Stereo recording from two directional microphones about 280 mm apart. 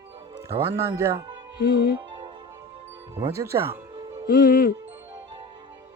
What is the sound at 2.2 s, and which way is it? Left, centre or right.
Music, centre.